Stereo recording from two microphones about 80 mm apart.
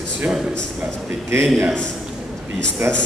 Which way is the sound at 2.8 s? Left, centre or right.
Right.